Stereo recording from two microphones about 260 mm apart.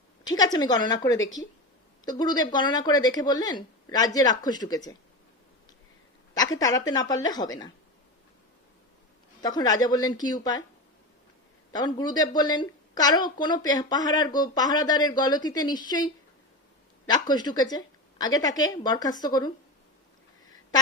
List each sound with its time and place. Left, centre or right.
0.3 s speech: centre
6.3 s speech: centre
9.4 s speech: centre
11.7 s speech: centre